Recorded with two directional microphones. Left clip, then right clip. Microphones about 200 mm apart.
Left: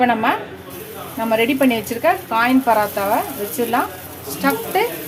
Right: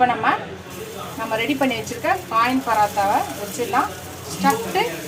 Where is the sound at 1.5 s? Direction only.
50° left (ahead or behind).